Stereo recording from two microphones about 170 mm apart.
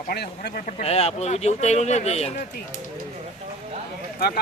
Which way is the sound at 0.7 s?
40° left (ahead or behind).